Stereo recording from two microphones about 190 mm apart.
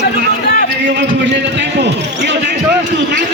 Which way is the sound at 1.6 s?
65° right (ahead or behind).